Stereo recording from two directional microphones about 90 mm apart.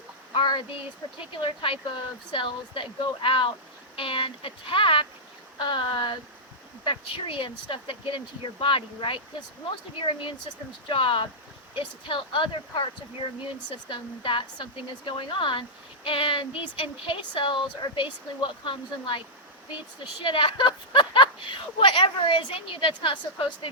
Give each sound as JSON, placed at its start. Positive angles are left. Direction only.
{"t": 0.3, "sound": "a sound", "side_deg": 60}
{"t": 1.2, "sound": "speech", "side_deg": 70}
{"t": 6.8, "sound": "speech", "side_deg": 70}
{"t": 10.8, "sound": "speech", "side_deg": 70}
{"t": 13.7, "sound": "speech", "side_deg": 65}
{"t": 20.2, "sound": "speech", "side_deg": 70}